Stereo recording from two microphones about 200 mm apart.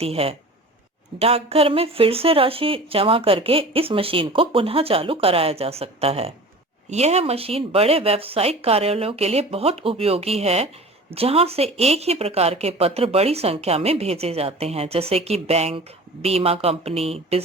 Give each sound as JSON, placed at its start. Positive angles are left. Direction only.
{"t": 0.0, "sound": "a woman's voice", "side_deg": -30}